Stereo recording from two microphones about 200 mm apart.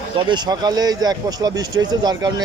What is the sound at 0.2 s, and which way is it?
Speech, 20° right (ahead or behind).